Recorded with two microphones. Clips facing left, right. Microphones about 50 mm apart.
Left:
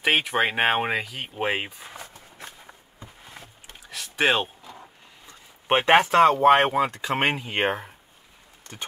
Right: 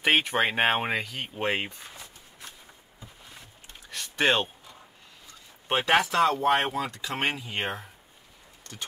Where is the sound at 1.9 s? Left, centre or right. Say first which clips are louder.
Left 5 dB; left.